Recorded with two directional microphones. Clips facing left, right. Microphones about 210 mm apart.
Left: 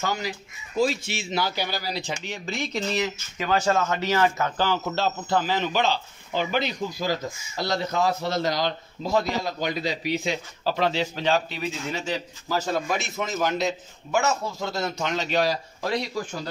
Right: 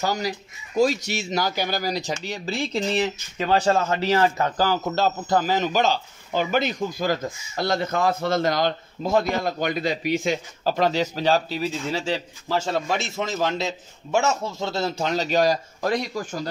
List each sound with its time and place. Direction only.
0.0 s speech: 40° right (ahead or behind)